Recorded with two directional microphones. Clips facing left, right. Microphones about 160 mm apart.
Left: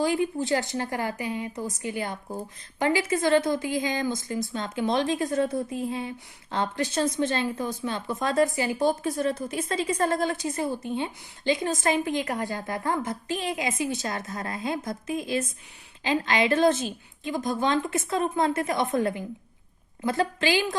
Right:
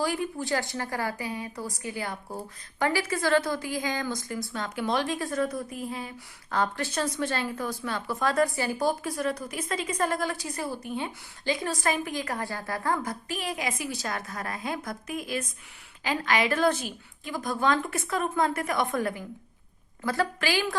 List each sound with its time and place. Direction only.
0.0 s a woman's voice: 20° left (ahead or behind)